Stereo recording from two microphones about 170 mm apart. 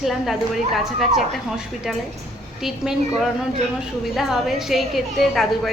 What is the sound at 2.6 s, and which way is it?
A woman's voice, centre (ahead or behind).